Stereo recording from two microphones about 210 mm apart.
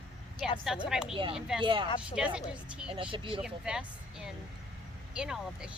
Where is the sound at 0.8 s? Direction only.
5° right (ahead or behind).